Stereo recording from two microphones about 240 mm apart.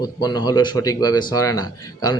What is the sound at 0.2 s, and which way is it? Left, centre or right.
A man's voice, centre.